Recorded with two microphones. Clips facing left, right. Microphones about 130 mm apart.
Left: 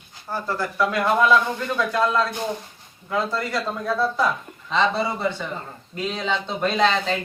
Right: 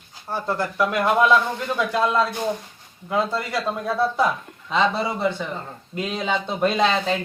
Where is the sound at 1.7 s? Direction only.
20° right (ahead or behind).